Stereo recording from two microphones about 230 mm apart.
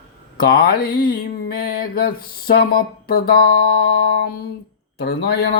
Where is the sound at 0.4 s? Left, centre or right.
Left.